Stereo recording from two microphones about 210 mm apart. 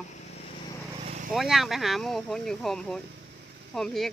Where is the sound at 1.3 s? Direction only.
Centre (ahead or behind).